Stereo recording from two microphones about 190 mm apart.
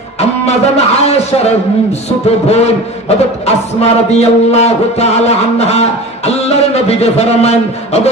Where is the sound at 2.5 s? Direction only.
35° left (ahead or behind).